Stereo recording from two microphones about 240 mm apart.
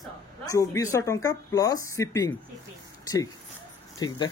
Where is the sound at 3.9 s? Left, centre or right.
Centre.